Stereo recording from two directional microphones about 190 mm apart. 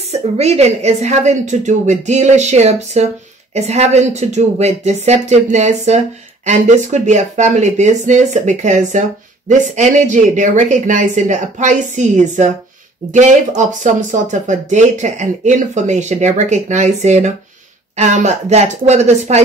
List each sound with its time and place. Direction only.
0.1 s speech: 35° right (ahead or behind)